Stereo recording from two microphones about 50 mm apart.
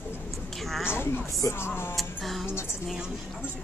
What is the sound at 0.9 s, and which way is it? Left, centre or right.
Speech, left.